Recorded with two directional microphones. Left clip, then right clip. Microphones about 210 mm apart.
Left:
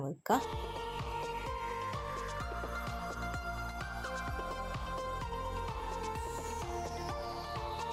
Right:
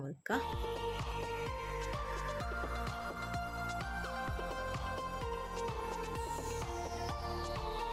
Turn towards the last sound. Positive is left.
turn(degrees=0)  # may be behind; listen again after turning